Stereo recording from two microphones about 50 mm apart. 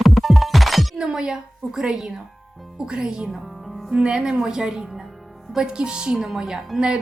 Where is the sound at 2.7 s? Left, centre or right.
Centre.